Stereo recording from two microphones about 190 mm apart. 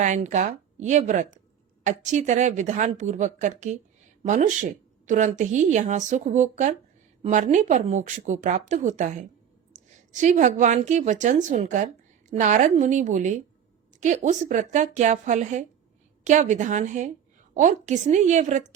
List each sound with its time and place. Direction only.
0.0 s a woman's voice: 40° right (ahead or behind)